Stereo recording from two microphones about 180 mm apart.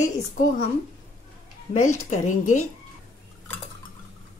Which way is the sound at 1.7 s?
40° left (ahead or behind).